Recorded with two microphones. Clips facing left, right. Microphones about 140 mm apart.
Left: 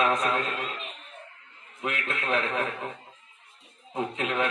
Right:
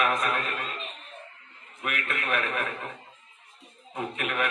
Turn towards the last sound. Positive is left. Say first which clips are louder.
# left 2 dB
turn(degrees=25)  # may be behind; listen again after turning